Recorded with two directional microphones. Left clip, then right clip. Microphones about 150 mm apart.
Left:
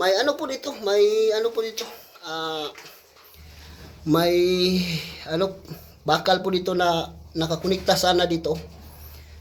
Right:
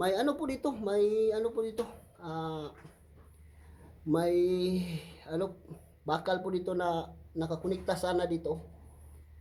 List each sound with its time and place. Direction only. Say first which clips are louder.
0.0 s speech: left 9 dB; 20° right (ahead or behind)
0.4 s speech: left 7 dB; 10° right (ahead or behind)
4.1 s speech: left 9 dB; 5° right (ahead or behind)